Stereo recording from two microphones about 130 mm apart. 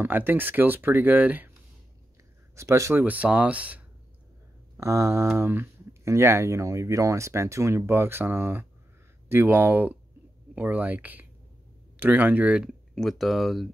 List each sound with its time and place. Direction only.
0.0 s speech: 15° right (ahead or behind)
2.5 s speech: 20° right (ahead or behind)
4.7 s speech: 20° right (ahead or behind)
12.9 s speech: centre (ahead or behind)